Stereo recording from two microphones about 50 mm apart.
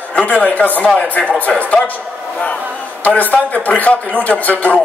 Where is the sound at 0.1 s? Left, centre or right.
Left.